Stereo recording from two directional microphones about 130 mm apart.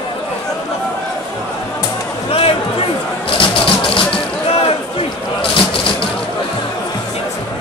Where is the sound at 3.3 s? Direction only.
40° left (ahead or behind).